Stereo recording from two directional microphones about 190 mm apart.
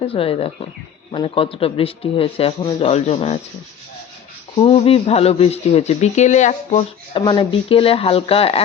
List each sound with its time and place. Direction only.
0.0 s a man's voice: 30° left (ahead or behind)
4.5 s speech: 30° left (ahead or behind)
7.1 s a man's voice: 25° left (ahead or behind)